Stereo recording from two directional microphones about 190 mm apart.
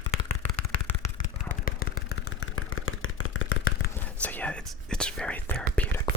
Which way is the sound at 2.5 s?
90° left.